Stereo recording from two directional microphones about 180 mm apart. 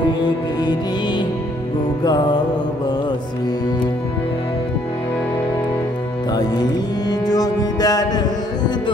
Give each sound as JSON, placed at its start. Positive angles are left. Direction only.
{"t": 0.2, "sound": "music", "side_deg": 25}
{"t": 6.3, "sound": "music", "side_deg": 20}